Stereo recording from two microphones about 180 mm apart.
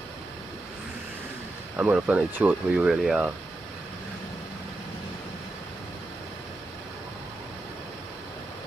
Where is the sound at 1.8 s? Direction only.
5° right (ahead or behind).